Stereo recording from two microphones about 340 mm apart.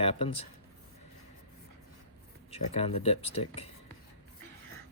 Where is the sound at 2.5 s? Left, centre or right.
Centre.